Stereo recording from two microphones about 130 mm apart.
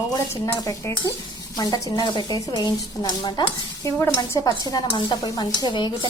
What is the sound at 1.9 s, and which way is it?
Stir, 35° left (ahead or behind).